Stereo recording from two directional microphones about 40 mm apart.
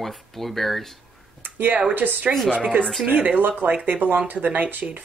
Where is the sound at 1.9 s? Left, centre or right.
Right.